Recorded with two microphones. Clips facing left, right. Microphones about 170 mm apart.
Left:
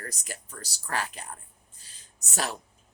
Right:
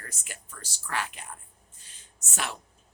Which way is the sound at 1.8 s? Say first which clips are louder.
Even; 35° left (ahead or behind).